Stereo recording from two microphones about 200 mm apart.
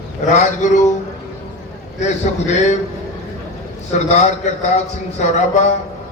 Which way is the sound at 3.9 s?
35° left (ahead or behind).